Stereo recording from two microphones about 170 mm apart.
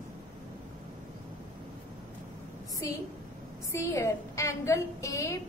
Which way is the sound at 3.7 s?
15° left (ahead or behind).